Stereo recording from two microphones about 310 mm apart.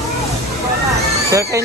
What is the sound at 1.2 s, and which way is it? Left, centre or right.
Speech, centre.